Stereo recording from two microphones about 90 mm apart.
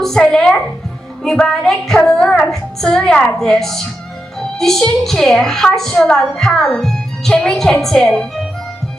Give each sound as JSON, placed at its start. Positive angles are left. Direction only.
{"t": 0.0, "sound": "a woman's voice", "side_deg": 5}